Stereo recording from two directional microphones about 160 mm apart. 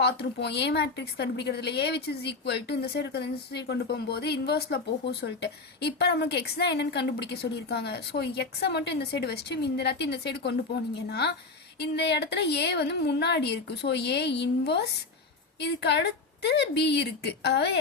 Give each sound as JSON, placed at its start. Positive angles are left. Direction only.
{"t": 0.0, "sound": "a woman's voice", "side_deg": 90}